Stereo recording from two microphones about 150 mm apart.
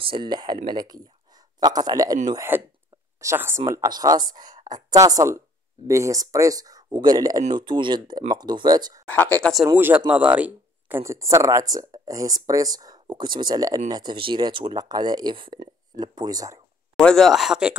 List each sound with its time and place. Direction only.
0.0 s speech: 30° right (ahead or behind)
2.5 s speech: 15° right (ahead or behind)
9.0 s speech: 10° left (ahead or behind)
9.8 s speech: 10° right (ahead or behind)
16.9 s speech: 5° left (ahead or behind)